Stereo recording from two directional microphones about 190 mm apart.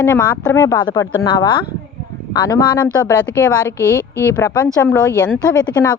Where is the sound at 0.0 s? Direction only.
15° left (ahead or behind).